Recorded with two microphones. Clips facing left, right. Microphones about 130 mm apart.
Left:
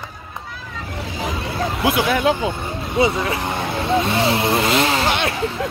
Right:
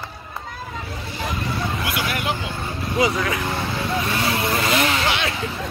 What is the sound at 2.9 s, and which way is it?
Speech, 25° left (ahead or behind).